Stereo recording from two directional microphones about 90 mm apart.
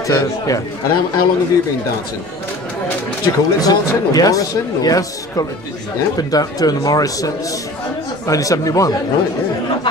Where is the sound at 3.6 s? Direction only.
45° left (ahead or behind).